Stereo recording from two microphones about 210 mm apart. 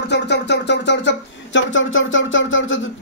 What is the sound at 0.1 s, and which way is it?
Speech, 55° left (ahead or behind).